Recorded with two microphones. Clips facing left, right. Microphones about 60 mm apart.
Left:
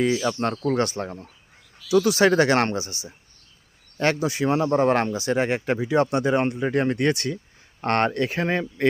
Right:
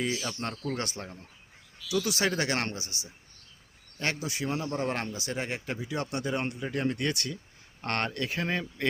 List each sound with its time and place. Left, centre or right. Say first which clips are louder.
0.0 s speech: left 10 dB; left
1.9 s speech: left 11 dB; left
3.9 s speech: left 10 dB; left
5.1 s speech: left 11 dB; left
6.1 s speech: left 10 dB; left